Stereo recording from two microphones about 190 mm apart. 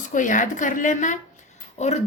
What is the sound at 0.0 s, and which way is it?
A woman's voice, 45° left (ahead or behind).